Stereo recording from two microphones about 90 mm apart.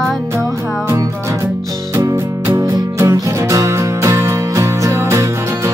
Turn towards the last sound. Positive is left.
turn(degrees=-30)  # may be behind; listen again after turning